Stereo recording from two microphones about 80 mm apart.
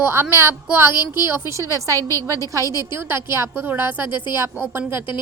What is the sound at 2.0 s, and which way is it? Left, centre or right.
Speech, left.